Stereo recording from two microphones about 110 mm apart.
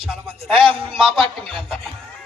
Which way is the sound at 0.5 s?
60° right (ahead or behind).